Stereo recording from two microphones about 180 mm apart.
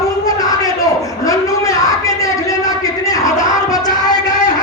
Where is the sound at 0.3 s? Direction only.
20° left (ahead or behind).